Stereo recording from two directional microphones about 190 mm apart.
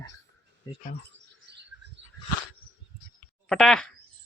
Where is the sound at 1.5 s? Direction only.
60° right (ahead or behind).